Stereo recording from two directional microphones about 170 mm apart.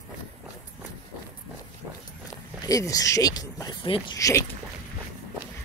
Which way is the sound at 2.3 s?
20° left (ahead or behind).